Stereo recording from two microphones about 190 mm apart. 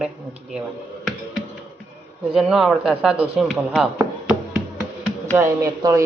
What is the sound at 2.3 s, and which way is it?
A man's voice, 5° right (ahead or behind).